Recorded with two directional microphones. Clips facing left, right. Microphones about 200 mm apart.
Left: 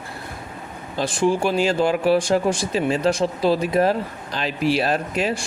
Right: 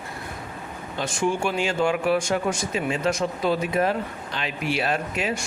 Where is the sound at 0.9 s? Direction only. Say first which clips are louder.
Left 5 dB; 35° left (ahead or behind).